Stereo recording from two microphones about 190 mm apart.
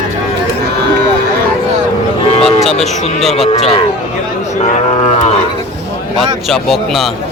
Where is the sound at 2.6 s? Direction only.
Centre (ahead or behind).